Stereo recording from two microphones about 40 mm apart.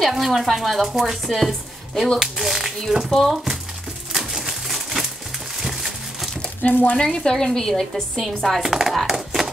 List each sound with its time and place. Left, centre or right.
0.2 s chopping: centre
2.1 s speech: centre
3.1 s speech: centre
4.1 s pigeon: centre
5.6 s a sound: centre
6.6 s speech: left
7.0 s speech: centre
8.2 s chopping: centre
8.6 s chopping: centre
9.0 s typewriter: centre